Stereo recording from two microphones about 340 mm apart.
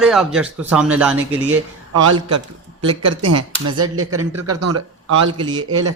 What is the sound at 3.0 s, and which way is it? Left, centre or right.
Speech, right.